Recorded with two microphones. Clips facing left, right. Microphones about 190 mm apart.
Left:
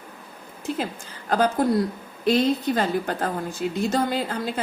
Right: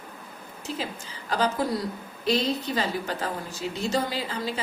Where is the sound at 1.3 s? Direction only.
50° left (ahead or behind).